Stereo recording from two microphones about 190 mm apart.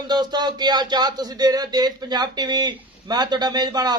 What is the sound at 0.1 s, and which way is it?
Speech, 20° right (ahead or behind).